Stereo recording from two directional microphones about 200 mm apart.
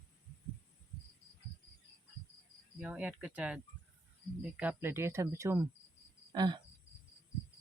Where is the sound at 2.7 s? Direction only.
5° right (ahead or behind).